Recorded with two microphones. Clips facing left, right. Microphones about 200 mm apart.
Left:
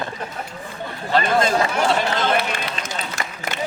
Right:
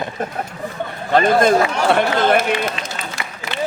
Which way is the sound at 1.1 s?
55° right (ahead or behind).